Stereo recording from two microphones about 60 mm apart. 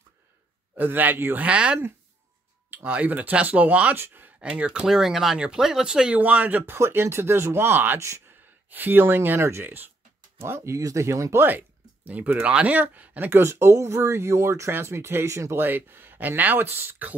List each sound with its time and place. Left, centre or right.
0.7 s speech: right
1.4 s speech: centre
2.8 s speech: right
3.9 s speech: right
4.4 s speech: centre
6.1 s speech: right
6.8 s speech: right
10.7 s speech: right
11.4 s speech: right
13.3 s speech: right
15.5 s speech: right